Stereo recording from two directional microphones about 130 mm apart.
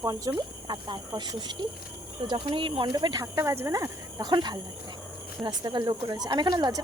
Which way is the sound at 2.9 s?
30° right (ahead or behind).